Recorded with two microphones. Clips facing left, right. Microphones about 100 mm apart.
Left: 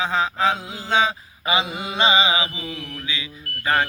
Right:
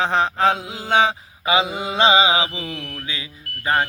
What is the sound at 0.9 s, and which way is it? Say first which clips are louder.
Mantra: right 3 dB; 65° right (ahead or behind).